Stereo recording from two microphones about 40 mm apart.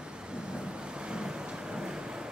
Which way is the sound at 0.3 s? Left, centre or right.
Right.